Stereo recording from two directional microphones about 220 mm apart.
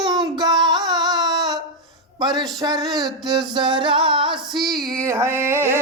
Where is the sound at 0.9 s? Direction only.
20° right (ahead or behind).